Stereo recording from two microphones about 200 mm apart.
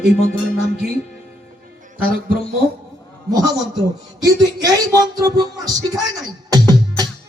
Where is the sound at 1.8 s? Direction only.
45° right (ahead or behind).